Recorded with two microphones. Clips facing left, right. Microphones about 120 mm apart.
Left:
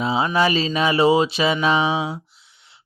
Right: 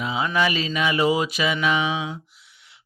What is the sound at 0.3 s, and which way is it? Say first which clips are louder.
Mantra: left 2 dB; 30° left (ahead or behind).